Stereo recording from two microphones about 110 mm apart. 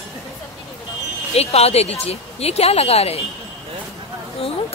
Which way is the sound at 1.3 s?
70° left (ahead or behind).